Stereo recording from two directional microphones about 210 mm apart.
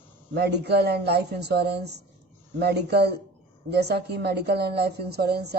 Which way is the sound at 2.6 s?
50° right (ahead or behind).